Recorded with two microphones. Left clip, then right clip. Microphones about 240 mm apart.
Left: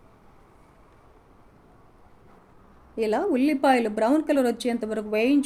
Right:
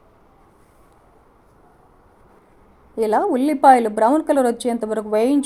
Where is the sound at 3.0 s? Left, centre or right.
Centre.